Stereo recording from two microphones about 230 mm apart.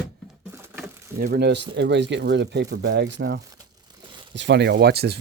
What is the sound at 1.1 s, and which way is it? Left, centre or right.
Speech, right.